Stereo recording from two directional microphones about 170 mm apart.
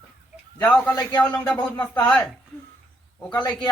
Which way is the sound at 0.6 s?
10° left (ahead or behind).